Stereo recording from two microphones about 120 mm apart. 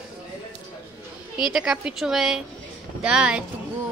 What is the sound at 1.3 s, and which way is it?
A woman's voice, 5° right (ahead or behind).